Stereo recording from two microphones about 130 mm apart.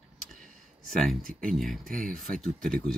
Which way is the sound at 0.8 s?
Centre (ahead or behind).